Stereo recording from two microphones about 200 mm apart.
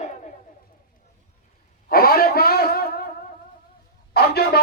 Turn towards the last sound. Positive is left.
turn(degrees=55)  # may be behind; listen again after turning